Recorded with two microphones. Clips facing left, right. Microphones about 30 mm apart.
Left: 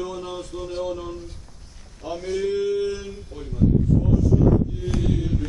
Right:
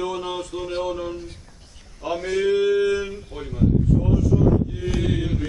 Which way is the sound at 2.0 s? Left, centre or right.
Right.